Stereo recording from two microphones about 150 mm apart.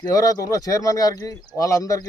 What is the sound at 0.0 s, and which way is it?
Speech, 25° left (ahead or behind).